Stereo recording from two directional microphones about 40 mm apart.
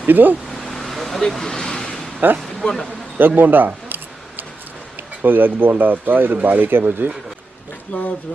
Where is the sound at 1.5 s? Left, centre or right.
Centre.